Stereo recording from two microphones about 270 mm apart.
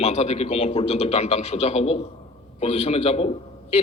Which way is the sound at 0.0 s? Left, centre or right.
Left.